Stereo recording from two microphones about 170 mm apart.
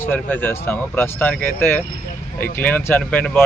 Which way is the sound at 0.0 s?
10° left (ahead or behind).